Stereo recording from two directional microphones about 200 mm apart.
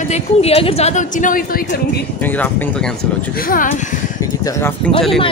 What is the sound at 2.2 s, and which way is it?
Speech, 10° left (ahead or behind).